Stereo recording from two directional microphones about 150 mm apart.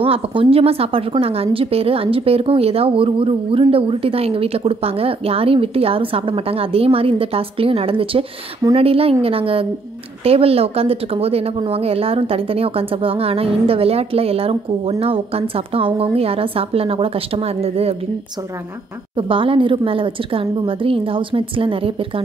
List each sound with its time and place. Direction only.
0.0 s speech: 35° right (ahead or behind)
19.1 s speech: 35° right (ahead or behind)